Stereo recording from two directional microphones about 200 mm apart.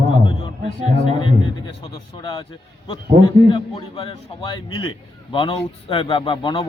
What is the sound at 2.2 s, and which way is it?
A man's voice, 25° left (ahead or behind).